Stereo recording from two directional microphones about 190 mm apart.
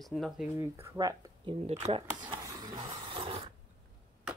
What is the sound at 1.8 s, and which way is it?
Speech, 25° right (ahead or behind).